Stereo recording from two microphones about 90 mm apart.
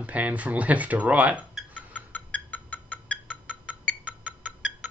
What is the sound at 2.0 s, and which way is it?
Music, 20° left (ahead or behind).